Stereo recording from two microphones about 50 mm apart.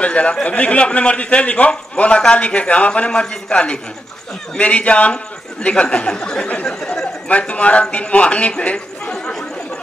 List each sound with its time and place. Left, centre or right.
0.0 s a man's voice: left